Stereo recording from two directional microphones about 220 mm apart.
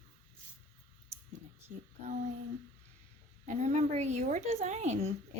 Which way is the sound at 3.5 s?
30° right (ahead or behind).